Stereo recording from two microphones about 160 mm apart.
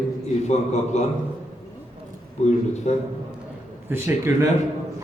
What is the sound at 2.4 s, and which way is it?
Speech, 45° left (ahead or behind).